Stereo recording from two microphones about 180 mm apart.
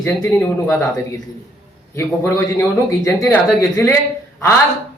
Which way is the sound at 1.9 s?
15° left (ahead or behind).